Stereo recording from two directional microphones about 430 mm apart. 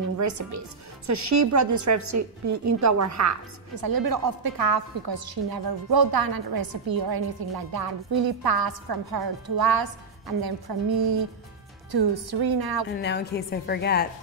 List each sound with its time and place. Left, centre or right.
0.2 s a woman's voice: right
3.7 s a woman's voice: right
12.9 s a woman's voice: left